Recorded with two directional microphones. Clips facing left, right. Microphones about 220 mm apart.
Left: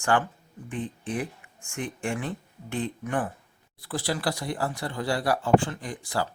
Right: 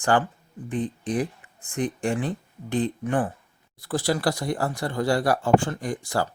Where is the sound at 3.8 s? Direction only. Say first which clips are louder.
Right 5 dB; 45° right (ahead or behind).